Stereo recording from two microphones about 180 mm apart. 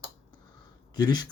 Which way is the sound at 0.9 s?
25° left (ahead or behind).